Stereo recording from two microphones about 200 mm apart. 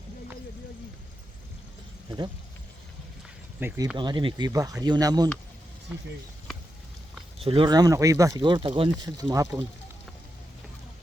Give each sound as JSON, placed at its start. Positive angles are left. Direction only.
{"t": 3.6, "sound": "speech", "side_deg": -10}
{"t": 3.9, "sound": "speech", "side_deg": -25}
{"t": 7.3, "sound": "speech", "side_deg": -25}